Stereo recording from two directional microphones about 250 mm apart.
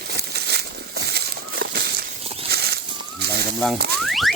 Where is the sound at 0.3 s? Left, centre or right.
Right.